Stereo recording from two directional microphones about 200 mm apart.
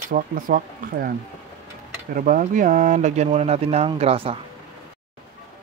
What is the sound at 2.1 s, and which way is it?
Speech, 40° right (ahead or behind).